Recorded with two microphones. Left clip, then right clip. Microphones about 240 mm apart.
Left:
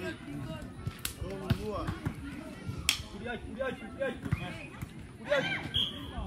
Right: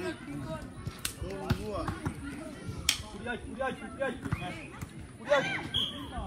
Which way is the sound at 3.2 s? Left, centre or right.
Centre.